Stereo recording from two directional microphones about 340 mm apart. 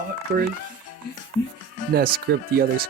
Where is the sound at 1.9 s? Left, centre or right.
Right.